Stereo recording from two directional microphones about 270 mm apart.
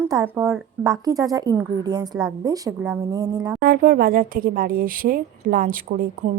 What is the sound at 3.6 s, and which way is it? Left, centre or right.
A woman's voice, right.